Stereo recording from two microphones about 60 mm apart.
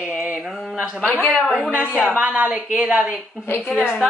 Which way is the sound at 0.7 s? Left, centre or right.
Centre.